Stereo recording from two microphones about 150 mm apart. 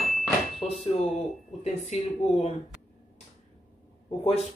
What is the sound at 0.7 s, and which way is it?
Speech, 45° left (ahead or behind).